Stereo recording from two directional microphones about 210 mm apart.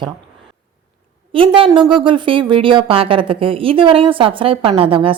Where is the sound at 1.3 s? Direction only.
25° right (ahead or behind).